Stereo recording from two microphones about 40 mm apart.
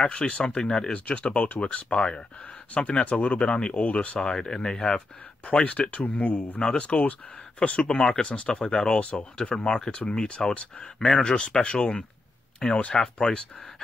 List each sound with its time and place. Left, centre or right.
0.0 s speech: left
0.9 s speech: left
4.2 s speech: centre; by 6.6 s left
6.6 s speech: left
8.0 s speech: centre
11.0 s speech: centre
11.6 s speech: left